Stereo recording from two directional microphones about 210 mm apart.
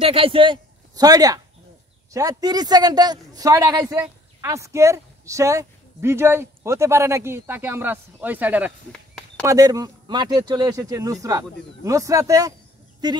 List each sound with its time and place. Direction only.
0.0 s a man's voice: 25° right (ahead or behind)